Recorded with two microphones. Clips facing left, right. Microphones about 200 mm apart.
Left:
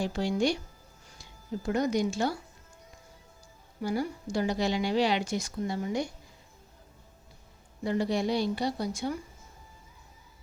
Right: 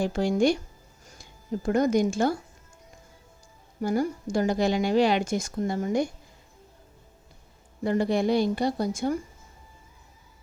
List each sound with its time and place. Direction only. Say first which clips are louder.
0.0 s a woman's voice: right 5 dB; 50° right (ahead or behind)
3.8 s a woman's voice: right 5 dB; 45° right (ahead or behind)
7.9 s a woman's voice: right 4 dB; 50° right (ahead or behind)